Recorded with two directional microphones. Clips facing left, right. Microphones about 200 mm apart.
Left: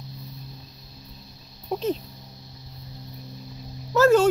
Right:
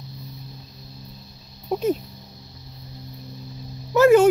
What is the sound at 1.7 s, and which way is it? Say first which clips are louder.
Speech: right 4 dB; 10° right (ahead or behind).